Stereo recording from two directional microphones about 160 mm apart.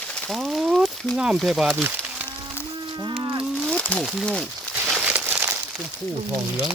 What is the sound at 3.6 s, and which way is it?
Speech, 10° left (ahead or behind).